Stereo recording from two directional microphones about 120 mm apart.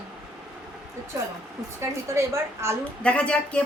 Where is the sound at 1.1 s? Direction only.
25° right (ahead or behind).